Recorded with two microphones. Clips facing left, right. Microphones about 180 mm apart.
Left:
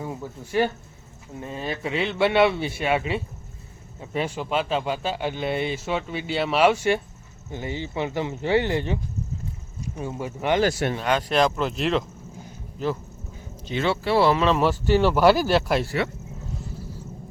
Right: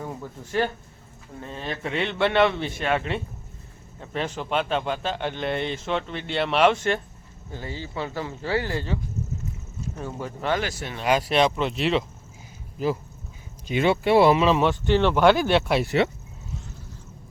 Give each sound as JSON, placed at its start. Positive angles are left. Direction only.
{"t": 0.0, "sound": "speech", "side_deg": 10}
{"t": 11.0, "sound": "speech", "side_deg": -10}
{"t": 13.7, "sound": "speech", "side_deg": -15}
{"t": 14.4, "sound": "speech", "side_deg": 0}
{"t": 15.8, "sound": "speech", "side_deg": -20}